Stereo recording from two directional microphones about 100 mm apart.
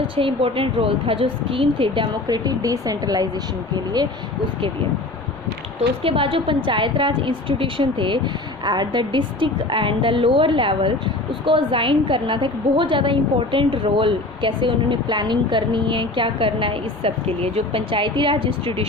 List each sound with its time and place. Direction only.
0.2 s a woman's voice: 65° right (ahead or behind)
2.2 s speech: 40° right (ahead or behind)
6.0 s a woman's voice: 65° right (ahead or behind)